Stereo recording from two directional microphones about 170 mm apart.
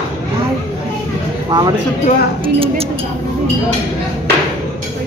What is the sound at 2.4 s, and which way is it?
Speech, 35° right (ahead or behind).